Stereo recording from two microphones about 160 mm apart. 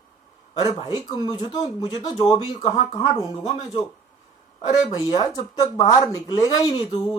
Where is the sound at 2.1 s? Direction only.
25° left (ahead or behind).